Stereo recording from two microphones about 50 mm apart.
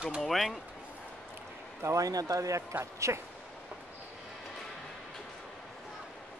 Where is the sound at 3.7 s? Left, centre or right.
Right.